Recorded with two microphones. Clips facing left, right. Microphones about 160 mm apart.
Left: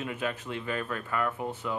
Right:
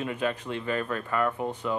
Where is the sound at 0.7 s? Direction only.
35° right (ahead or behind).